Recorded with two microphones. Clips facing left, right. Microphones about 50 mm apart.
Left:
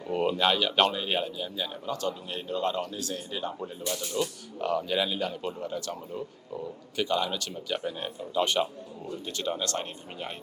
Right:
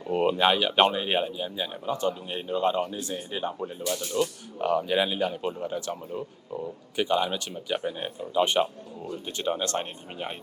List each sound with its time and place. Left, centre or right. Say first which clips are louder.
0.1 s speech: right 3 dB; centre
3.6 s speech: right 3 dB; centre